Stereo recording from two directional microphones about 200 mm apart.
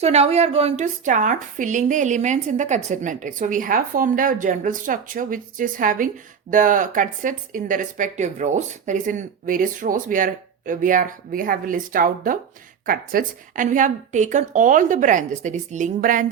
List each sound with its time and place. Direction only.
0.0 s a woman's voice: 30° right (ahead or behind)